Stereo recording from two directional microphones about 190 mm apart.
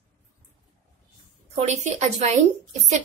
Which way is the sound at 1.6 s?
35° right (ahead or behind).